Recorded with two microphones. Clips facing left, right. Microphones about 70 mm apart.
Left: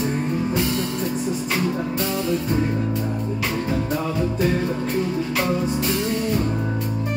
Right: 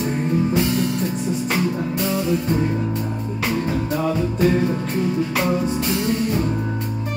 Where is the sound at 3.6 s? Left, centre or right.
Centre.